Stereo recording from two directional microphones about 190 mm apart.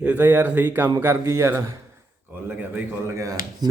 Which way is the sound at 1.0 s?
15° right (ahead or behind).